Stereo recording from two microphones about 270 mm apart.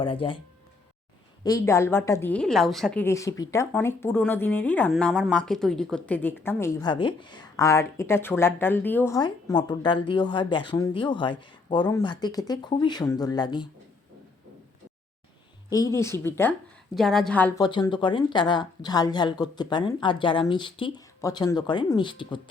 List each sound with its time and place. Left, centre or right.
0.0 s speech: centre
1.5 s a woman's voice: centre
15.7 s a woman's voice: centre
17.7 s a woman's voice: centre